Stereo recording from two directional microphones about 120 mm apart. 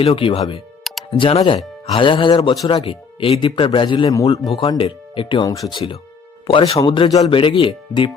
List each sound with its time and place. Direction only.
0.0 s speech: 50° left (ahead or behind)
0.9 s music: centre (ahead or behind)
1.2 s speech: 50° left (ahead or behind); by 4.9 s 35° left (ahead or behind)
4.9 s speech: 45° left (ahead or behind)
5.5 s speech: 30° left (ahead or behind)
5.7 s speech: 40° left (ahead or behind)